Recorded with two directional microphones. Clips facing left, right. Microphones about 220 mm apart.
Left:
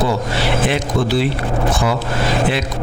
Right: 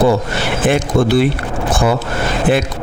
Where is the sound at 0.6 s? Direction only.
50° right (ahead or behind).